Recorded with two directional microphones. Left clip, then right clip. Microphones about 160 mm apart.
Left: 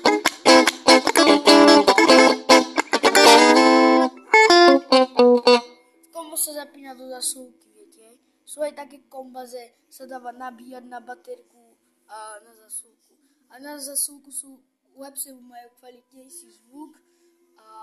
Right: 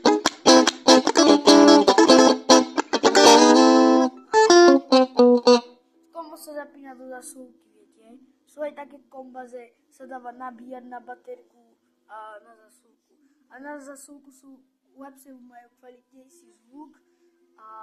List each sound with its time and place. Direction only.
0.0 s music: centre (ahead or behind)
6.1 s music: 40° left (ahead or behind)
8.0 s a sound: 30° left (ahead or behind)
9.5 s a woman's voice: 30° left (ahead or behind)
15.0 s a woman's voice: 25° left (ahead or behind)
16.7 s speech: 45° left (ahead or behind)